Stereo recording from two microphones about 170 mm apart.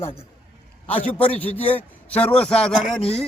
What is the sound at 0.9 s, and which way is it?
A man's voice, 10° left (ahead or behind).